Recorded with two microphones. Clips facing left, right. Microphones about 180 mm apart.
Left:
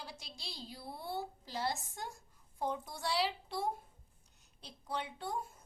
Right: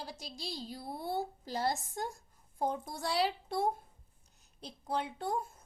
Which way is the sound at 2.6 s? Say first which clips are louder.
Right 3 dB; 45° right (ahead or behind).